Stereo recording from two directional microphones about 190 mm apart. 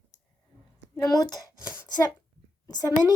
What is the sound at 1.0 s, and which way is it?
Speech, 20° left (ahead or behind).